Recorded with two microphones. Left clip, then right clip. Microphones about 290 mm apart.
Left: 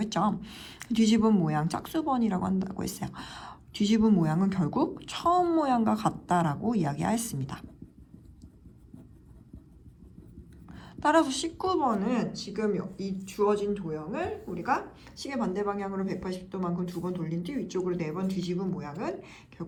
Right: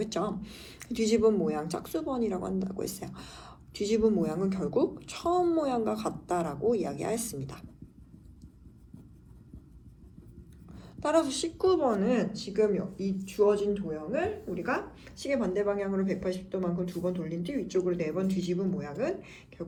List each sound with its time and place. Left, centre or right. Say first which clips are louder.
0.0 s speech: left 3 dB; left
10.8 s speech: left 3 dB; left